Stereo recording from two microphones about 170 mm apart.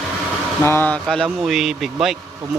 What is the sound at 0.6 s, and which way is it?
Speech, 10° left (ahead or behind).